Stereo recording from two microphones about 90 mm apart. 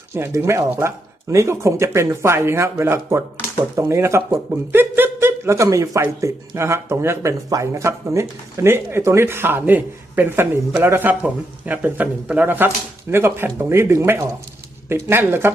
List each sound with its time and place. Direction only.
0.1 s speech: 30° right (ahead or behind)